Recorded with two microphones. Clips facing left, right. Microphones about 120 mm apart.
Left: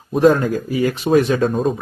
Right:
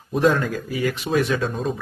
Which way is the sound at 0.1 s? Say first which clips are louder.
Left 6 dB; 40° left (ahead or behind).